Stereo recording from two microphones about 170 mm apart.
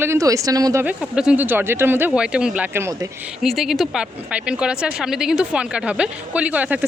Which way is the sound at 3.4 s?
Centre (ahead or behind).